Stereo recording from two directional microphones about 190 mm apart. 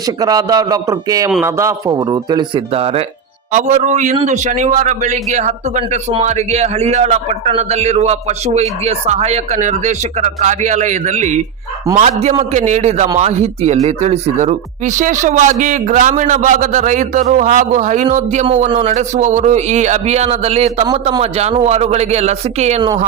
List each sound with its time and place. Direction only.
0.2 s a man's voice: 20° right (ahead or behind); by 22.8 s 35° right (ahead or behind)